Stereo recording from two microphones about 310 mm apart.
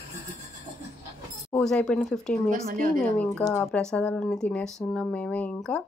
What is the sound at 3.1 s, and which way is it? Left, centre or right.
Speech, centre.